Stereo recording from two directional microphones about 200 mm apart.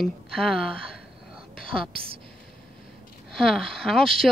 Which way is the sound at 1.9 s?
25° right (ahead or behind).